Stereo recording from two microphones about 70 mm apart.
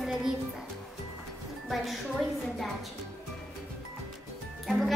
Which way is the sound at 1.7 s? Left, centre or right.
Centre.